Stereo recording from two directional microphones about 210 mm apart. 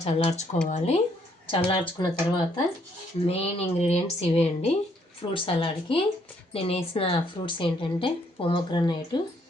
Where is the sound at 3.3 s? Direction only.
30° left (ahead or behind).